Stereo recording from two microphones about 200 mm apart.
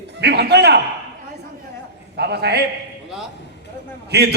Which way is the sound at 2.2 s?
55° right (ahead or behind).